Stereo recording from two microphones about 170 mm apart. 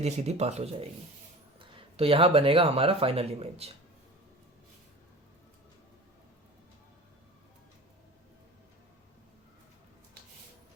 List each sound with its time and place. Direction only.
0.0 s speech: 40° right (ahead or behind)